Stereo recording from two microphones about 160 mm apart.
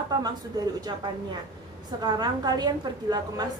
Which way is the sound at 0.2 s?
25° right (ahead or behind).